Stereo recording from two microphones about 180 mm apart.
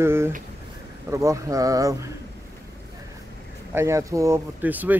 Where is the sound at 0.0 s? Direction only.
15° right (ahead or behind).